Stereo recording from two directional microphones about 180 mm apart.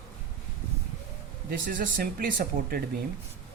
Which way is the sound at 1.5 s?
50° right (ahead or behind).